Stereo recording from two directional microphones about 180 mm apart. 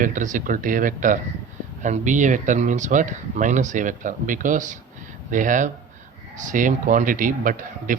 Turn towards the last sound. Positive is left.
turn(degrees=-50)  # may be behind; listen again after turning